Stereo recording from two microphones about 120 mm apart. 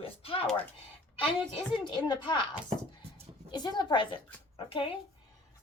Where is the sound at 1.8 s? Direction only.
40° left (ahead or behind).